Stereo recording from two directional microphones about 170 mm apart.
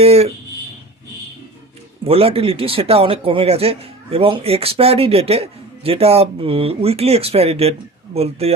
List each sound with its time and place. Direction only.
0.0 s speech: 35° right (ahead or behind)
2.0 s speech: 35° right (ahead or behind)